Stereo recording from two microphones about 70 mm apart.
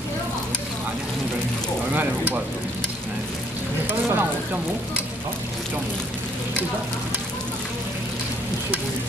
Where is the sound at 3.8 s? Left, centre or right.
Right.